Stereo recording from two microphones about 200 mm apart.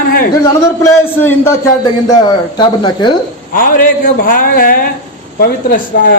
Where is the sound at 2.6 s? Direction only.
20° left (ahead or behind).